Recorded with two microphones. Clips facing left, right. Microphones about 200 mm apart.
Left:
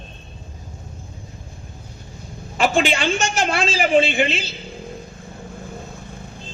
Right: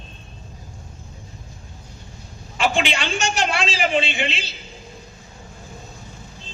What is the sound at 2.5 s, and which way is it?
A man's voice, 45° left (ahead or behind).